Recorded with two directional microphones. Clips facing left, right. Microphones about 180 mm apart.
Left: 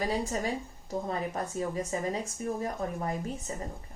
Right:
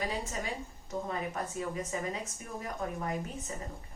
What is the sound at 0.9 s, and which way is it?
A woman's voice, 35° left (ahead or behind).